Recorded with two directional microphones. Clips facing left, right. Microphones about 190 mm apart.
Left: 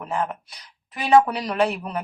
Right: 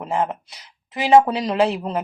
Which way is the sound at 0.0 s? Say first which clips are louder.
Right 4 dB; 25° right (ahead or behind).